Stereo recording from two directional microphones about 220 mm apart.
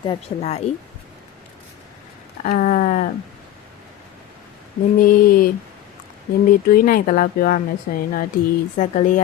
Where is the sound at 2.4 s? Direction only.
35° left (ahead or behind).